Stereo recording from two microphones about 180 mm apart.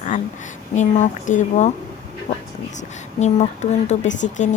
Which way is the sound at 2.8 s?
40° left (ahead or behind).